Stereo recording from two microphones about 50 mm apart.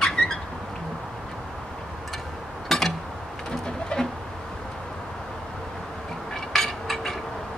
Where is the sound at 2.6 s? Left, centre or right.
Centre.